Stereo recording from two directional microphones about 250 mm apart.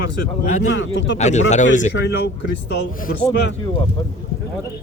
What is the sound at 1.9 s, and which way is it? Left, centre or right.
Speech, left.